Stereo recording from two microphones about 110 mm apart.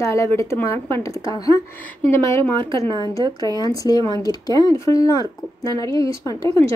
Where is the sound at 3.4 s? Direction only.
35° right (ahead or behind).